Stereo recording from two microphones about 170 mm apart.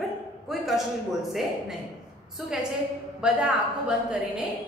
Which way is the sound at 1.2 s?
Centre (ahead or behind).